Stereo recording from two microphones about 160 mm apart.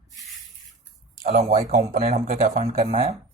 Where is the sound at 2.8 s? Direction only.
50° right (ahead or behind).